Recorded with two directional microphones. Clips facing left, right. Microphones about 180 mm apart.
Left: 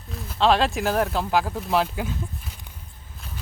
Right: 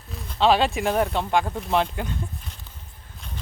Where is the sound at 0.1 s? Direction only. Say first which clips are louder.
Even; centre (ahead or behind).